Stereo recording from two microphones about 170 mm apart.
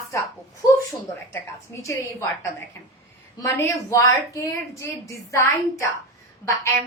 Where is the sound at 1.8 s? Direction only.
20° left (ahead or behind).